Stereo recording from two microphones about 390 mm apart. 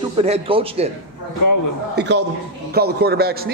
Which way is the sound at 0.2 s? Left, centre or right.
Centre.